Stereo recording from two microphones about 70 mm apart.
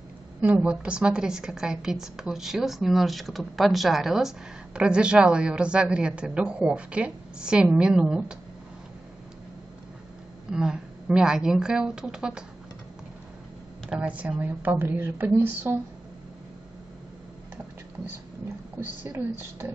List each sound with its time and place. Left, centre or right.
0.6 s a woman's voice: centre
10.5 s a woman's voice: centre
13.8 s a woman's voice: centre
18.8 s speech: right